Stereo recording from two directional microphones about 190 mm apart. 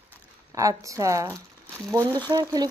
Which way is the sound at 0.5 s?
15° right (ahead or behind).